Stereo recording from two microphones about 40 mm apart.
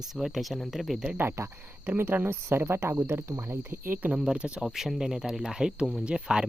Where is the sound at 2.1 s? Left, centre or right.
Right.